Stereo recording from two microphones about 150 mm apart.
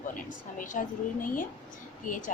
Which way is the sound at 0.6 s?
60° left (ahead or behind).